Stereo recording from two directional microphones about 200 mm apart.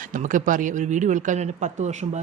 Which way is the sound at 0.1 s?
40° right (ahead or behind).